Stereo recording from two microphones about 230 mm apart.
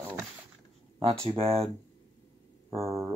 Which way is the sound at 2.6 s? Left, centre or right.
Centre.